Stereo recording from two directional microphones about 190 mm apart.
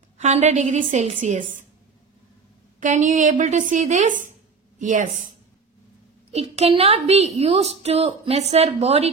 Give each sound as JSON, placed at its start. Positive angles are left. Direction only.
{"t": 0.2, "sound": "a woman's voice", "side_deg": -35}
{"t": 2.8, "sound": "a woman's voice", "side_deg": -40}
{"t": 6.3, "sound": "a woman's voice", "side_deg": -35}